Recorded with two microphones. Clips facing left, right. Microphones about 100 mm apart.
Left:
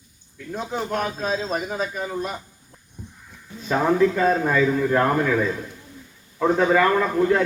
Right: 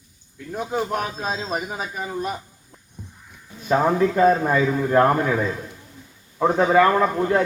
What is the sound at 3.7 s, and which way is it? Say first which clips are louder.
A man's voice: even; 20° right (ahead or behind).